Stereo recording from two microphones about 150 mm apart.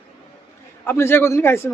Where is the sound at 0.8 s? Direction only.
15° left (ahead or behind).